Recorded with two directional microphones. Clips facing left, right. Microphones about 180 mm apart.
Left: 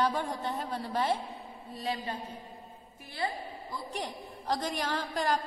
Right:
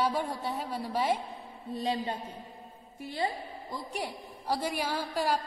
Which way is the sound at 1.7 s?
25° right (ahead or behind).